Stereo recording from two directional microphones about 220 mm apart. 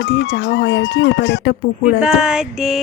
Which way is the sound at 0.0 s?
55° left (ahead or behind).